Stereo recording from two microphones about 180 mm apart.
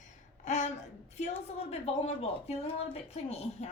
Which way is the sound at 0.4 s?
40° left (ahead or behind).